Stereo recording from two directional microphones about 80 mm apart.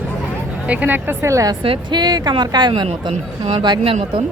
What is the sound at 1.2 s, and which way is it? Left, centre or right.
Speech, right.